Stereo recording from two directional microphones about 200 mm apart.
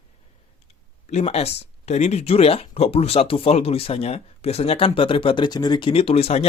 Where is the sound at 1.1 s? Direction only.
30° left (ahead or behind).